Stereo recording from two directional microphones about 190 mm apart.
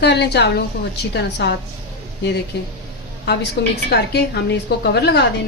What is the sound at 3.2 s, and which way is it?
A woman's voice, 60° left (ahead or behind).